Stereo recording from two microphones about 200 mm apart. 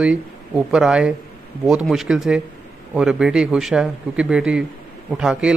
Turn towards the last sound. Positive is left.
turn(degrees=-5)  # may be behind; listen again after turning